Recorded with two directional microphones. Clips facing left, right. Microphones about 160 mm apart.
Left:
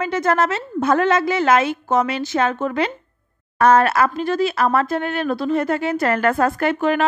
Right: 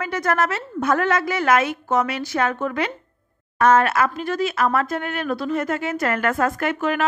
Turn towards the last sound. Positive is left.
turn(degrees=30)  # may be behind; listen again after turning